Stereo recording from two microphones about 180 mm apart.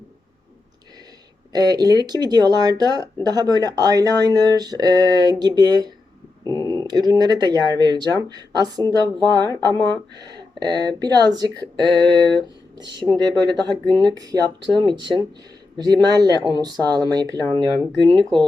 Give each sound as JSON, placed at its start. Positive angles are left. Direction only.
{"t": 1.5, "sound": "speech", "side_deg": -20}